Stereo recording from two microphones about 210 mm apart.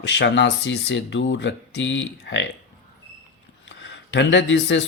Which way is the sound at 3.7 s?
60° left (ahead or behind).